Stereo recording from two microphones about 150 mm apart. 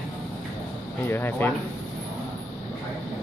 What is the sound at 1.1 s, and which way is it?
Speech, 15° left (ahead or behind).